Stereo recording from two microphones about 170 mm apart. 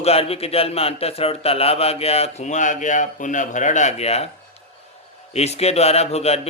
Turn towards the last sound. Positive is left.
turn(degrees=40)  # may be behind; listen again after turning